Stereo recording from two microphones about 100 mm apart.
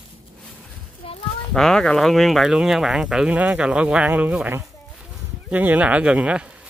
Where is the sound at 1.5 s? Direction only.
5° left (ahead or behind); by 6.5 s 10° right (ahead or behind).